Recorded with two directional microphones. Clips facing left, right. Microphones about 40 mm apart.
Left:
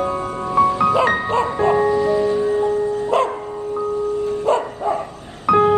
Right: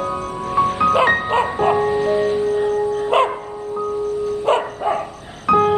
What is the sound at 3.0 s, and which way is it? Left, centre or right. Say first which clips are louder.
Dog: right 3 dB; right.